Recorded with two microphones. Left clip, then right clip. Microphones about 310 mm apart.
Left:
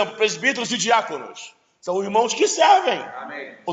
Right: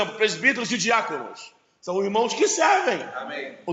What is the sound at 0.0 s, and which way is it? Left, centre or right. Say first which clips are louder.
A man's voice: left 1 dB; left.